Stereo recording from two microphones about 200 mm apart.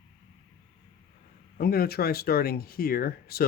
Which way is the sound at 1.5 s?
50° left (ahead or behind).